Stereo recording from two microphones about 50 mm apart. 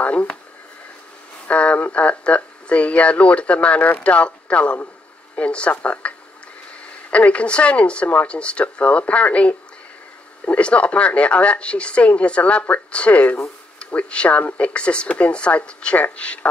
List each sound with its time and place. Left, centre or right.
0.0 s speech: left
1.5 s a sound: left
1.9 s speech: left